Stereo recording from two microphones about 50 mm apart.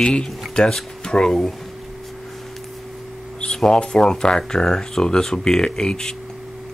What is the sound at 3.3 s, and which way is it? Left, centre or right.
Speech, centre.